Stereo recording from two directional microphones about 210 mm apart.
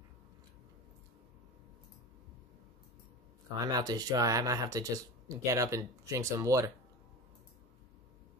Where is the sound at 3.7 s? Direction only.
20° right (ahead or behind).